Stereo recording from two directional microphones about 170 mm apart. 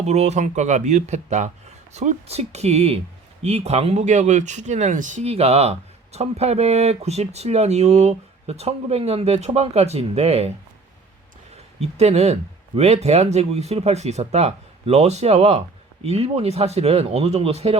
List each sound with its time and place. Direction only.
0.0 s speech: 40° right (ahead or behind)
11.5 s speech: 40° right (ahead or behind)